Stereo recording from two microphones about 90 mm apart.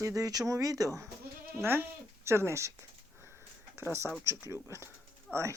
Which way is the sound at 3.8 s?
25° right (ahead or behind).